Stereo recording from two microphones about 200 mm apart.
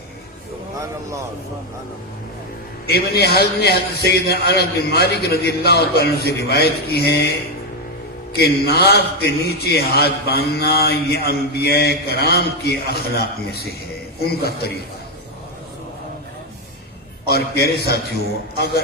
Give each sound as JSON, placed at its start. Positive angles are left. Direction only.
{"t": 2.8, "sound": "a man's voice", "side_deg": 50}
{"t": 17.2, "sound": "a man's voice", "side_deg": 50}